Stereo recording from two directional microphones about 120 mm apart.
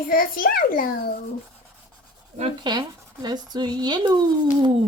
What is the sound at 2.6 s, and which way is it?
Speech, 35° right (ahead or behind).